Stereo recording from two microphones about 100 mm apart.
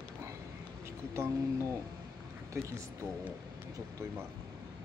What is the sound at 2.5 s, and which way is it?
Speech, 30° right (ahead or behind).